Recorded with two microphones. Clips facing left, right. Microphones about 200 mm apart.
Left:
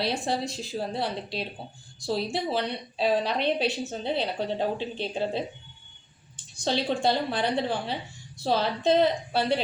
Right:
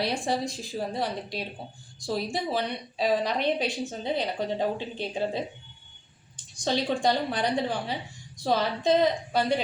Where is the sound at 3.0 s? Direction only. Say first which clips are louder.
Even; 10° right (ahead or behind).